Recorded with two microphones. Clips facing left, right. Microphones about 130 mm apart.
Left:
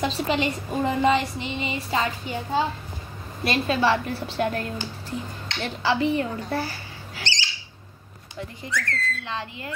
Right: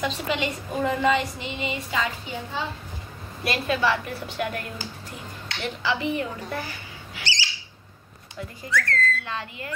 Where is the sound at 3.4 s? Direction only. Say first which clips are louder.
Left 2 dB; 25° left (ahead or behind).